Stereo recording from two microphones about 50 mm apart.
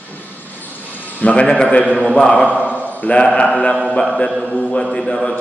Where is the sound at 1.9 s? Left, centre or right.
Left.